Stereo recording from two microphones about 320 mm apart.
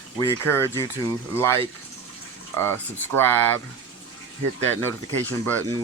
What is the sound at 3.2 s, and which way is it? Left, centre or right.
Speech, centre.